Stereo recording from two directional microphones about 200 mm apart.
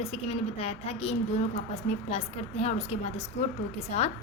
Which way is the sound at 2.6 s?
30° left (ahead or behind).